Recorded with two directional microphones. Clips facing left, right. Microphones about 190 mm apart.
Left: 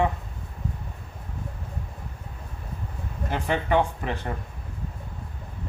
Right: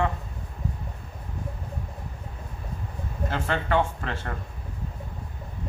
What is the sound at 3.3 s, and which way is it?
Speech, 15° left (ahead or behind).